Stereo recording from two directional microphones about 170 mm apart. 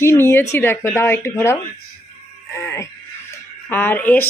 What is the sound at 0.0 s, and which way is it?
Speech, 15° left (ahead or behind).